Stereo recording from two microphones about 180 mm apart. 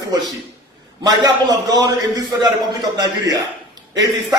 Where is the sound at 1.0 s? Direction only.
20° right (ahead or behind).